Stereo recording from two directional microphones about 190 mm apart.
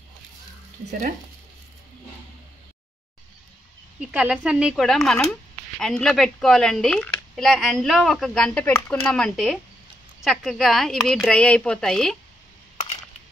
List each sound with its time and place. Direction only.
4.0 s speech: 5° right (ahead or behind)